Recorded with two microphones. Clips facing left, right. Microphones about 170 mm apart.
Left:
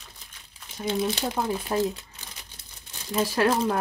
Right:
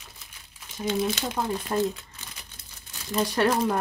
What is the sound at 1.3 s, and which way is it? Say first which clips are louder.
Speech: left 1 dB; 5° left (ahead or behind).